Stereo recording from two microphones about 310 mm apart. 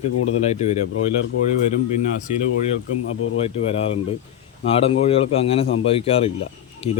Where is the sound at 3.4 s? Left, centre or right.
Centre.